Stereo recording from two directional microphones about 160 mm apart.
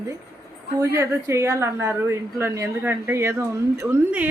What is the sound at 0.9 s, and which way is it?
Speech, 20° right (ahead or behind).